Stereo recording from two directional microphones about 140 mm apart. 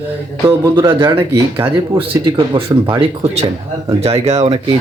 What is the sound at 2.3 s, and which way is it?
Speech, 35° right (ahead or behind).